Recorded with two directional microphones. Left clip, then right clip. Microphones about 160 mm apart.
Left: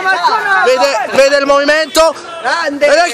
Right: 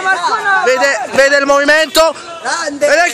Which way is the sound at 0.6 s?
Centre (ahead or behind).